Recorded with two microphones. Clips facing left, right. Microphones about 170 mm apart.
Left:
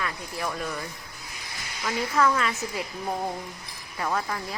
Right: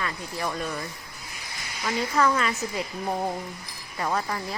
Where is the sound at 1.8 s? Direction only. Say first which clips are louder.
Even; 5° right (ahead or behind).